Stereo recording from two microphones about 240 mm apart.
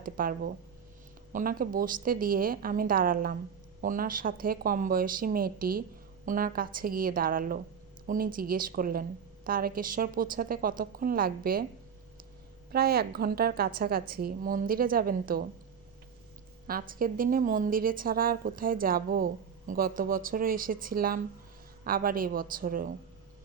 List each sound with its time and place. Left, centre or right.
0.0 s a woman's voice: right
12.7 s a woman's voice: right
16.6 s a woman's voice: right